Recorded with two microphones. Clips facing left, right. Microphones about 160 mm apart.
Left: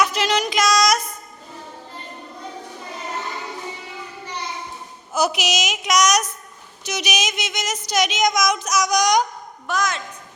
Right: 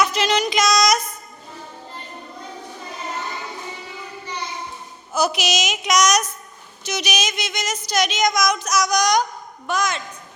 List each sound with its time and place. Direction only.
0.0 s child singing: 10° left (ahead or behind)
5.1 s a woman's voice: 15° left (ahead or behind)
9.6 s a woman's voice: centre (ahead or behind)